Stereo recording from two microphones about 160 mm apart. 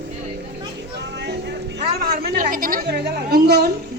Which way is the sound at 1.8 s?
70° right (ahead or behind).